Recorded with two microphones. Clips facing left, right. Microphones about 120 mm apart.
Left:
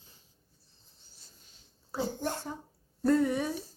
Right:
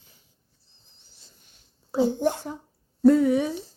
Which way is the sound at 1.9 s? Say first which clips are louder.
Right 11 dB; 20° right (ahead or behind).